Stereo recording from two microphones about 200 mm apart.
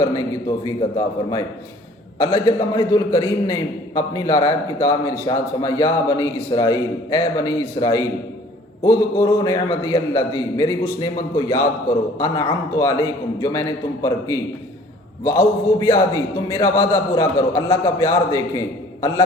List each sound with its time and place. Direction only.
0.8 s a man's voice: 20° left (ahead or behind)